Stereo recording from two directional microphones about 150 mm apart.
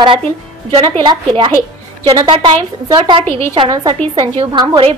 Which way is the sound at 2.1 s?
30° right (ahead or behind).